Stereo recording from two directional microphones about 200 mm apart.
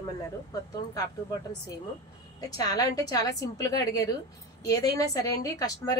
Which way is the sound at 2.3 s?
20° left (ahead or behind).